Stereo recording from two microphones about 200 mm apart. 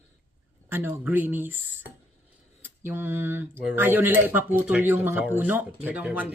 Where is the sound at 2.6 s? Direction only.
10° right (ahead or behind).